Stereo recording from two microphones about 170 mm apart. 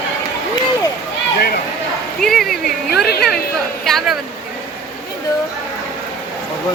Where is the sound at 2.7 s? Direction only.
70° left (ahead or behind).